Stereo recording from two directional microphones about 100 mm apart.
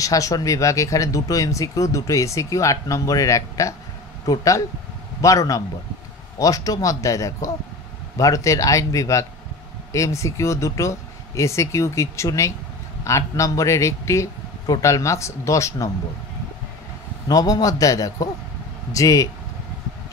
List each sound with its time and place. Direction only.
0.0 s speech: 35° left (ahead or behind)
17.3 s speech: 40° left (ahead or behind)